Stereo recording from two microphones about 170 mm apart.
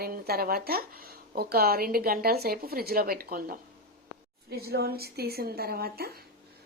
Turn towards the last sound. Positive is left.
turn(degrees=-65)  # may be behind; listen again after turning